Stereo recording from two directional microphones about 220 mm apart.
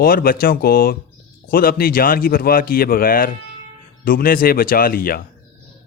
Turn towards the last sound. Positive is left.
turn(degrees=40)  # may be behind; listen again after turning